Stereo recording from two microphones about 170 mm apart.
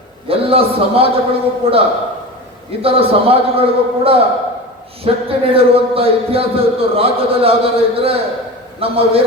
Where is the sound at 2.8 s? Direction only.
35° right (ahead or behind).